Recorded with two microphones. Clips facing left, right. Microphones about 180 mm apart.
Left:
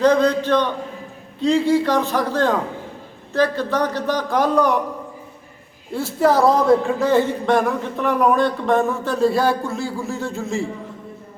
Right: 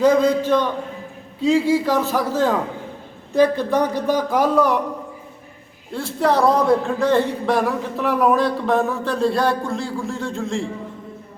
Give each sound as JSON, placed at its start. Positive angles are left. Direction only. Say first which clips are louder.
{"t": 0.0, "sound": "speech", "louder": "even", "side_deg": -10}
{"t": 5.9, "sound": "speech", "louder": "left 2 dB", "side_deg": 5}